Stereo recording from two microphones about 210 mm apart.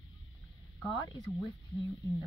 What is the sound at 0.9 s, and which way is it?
Speech, 20° left (ahead or behind).